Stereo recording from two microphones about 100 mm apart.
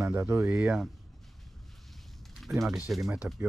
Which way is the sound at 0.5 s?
5° right (ahead or behind).